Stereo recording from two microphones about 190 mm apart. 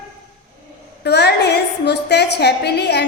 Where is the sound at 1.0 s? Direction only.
60° left (ahead or behind).